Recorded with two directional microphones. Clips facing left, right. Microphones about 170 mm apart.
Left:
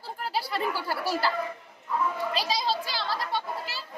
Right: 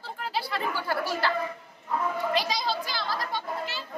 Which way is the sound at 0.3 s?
40° left (ahead or behind).